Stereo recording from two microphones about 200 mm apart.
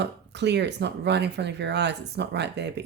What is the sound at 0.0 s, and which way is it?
Speech, 60° right (ahead or behind).